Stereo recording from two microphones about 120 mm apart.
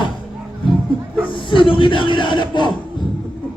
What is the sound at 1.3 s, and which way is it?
Speech, 45° left (ahead or behind).